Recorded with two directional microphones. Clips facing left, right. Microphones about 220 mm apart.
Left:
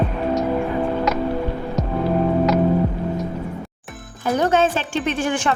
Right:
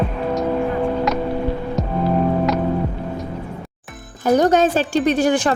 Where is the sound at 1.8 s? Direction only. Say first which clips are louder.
Even; centre (ahead or behind).